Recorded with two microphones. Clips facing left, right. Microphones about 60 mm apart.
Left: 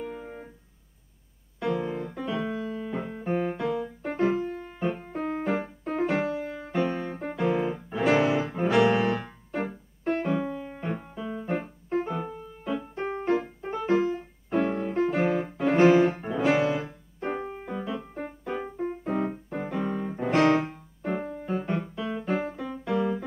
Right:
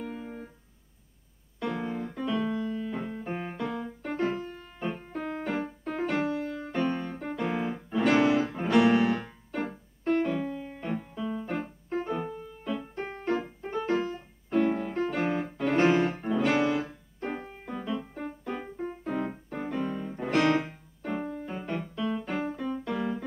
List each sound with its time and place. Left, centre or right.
0.0 s keyboard: centre
1.6 s piano: centre
2.9 s music: centre
5.2 s music: left
7.4 s music: centre
22.8 s music: centre